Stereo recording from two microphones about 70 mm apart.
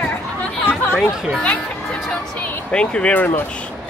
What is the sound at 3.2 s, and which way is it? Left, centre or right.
Speech, left.